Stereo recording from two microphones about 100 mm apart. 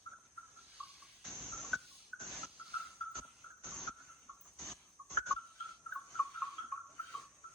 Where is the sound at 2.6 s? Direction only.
10° right (ahead or behind).